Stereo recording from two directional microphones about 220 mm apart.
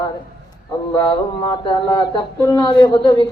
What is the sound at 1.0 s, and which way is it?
A woman's voice, 15° left (ahead or behind).